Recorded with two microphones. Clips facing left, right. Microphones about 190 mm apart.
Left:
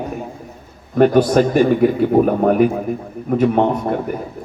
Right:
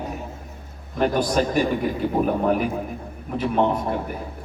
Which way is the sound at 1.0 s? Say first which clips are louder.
Left 9 dB; 50° left (ahead or behind).